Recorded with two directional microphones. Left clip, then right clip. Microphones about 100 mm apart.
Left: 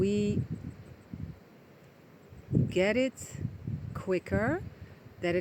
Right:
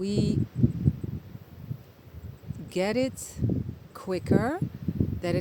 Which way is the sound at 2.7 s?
15° right (ahead or behind).